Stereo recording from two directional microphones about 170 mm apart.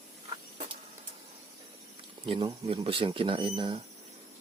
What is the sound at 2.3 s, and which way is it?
Speech, 30° right (ahead or behind).